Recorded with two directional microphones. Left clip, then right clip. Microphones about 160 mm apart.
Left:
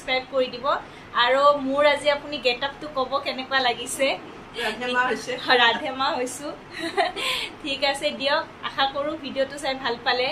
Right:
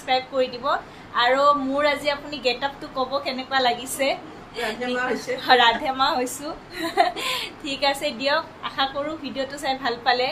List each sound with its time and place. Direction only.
0.0 s a woman's voice: 15° right (ahead or behind)
4.7 s a man's voice: 15° left (ahead or behind)
5.4 s a woman's voice: 20° right (ahead or behind)